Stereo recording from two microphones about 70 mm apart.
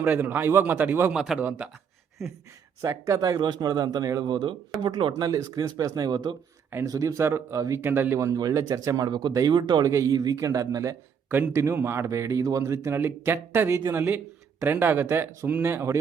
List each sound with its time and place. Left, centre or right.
0.0 s speech: right
1.1 s a man's voice: centre
1.4 s speech: right
2.8 s speech: right
3.2 s speech: right
6.8 s speech: right
8.5 s speech: right
9.0 s speech: right
9.3 s speech: right
10.1 s speech: right
10.3 s speech: right
11.5 s speech: right